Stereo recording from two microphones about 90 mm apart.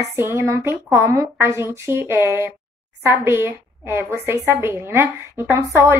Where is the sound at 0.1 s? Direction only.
30° right (ahead or behind).